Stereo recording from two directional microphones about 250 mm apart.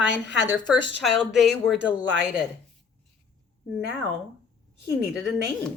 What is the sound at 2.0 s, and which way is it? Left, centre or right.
Speech, right.